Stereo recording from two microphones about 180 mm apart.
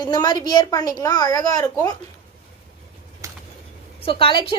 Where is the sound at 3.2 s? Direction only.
15° right (ahead or behind).